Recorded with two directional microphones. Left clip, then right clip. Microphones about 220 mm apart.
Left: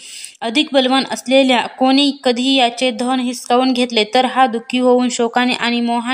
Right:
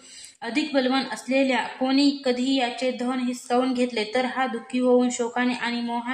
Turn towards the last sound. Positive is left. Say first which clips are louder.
# left 10 dB
turn(degrees=45)  # may be behind; listen again after turning